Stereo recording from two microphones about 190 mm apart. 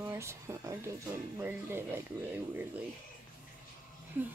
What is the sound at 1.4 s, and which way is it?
Speech, 10° right (ahead or behind).